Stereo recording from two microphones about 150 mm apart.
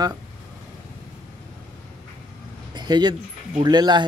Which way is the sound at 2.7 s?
30° right (ahead or behind).